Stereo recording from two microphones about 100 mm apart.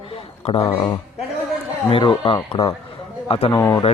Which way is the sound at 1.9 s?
60° left (ahead or behind).